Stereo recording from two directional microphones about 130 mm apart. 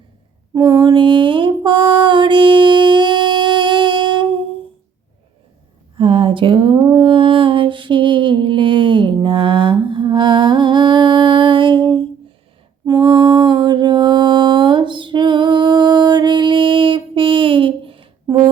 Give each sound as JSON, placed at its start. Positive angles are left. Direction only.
{"t": 0.5, "sound": "mantra", "side_deg": -25}
{"t": 0.9, "sound": "mantra", "side_deg": -40}
{"t": 6.0, "sound": "a sound", "side_deg": -40}
{"t": 12.8, "sound": "mantra", "side_deg": -30}